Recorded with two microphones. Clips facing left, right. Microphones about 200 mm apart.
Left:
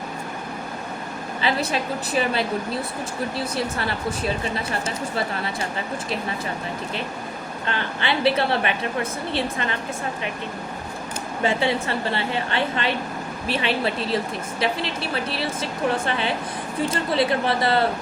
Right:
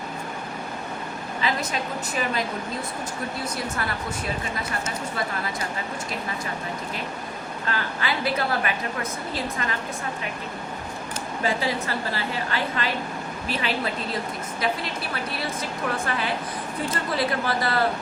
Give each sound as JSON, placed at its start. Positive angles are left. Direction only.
{"t": 1.4, "sound": "a woman's voice", "side_deg": 30}
{"t": 3.5, "sound": "a woman's voice", "side_deg": 30}
{"t": 7.7, "sound": "a woman's voice", "side_deg": 30}
{"t": 11.4, "sound": "a woman's voice", "side_deg": 25}